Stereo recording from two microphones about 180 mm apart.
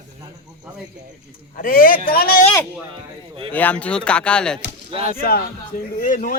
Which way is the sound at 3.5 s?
10° left (ahead or behind).